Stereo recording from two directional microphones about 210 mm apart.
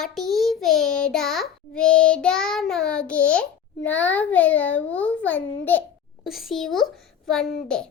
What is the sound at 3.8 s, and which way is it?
A child's voice, 10° left (ahead or behind).